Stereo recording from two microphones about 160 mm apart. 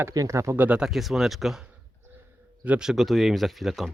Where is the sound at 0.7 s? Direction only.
5° right (ahead or behind).